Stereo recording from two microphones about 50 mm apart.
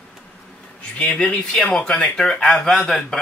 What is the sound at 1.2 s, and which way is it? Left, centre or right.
Speech, left.